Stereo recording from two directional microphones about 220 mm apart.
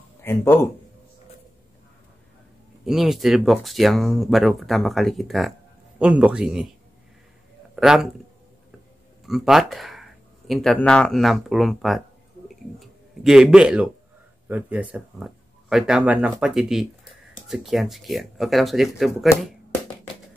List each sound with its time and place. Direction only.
0.2 s speech: 10° left (ahead or behind)
2.8 s speech: centre (ahead or behind)
7.7 s speech: 5° right (ahead or behind)
9.2 s speech: centre (ahead or behind)